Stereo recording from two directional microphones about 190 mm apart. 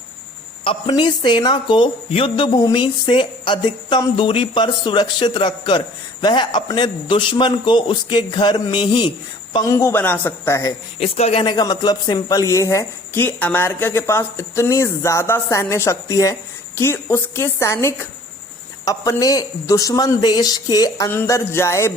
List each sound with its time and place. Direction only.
0.6 s speech: 25° left (ahead or behind)
11.0 s speech: 30° left (ahead or behind); by 21.9 s 15° left (ahead or behind)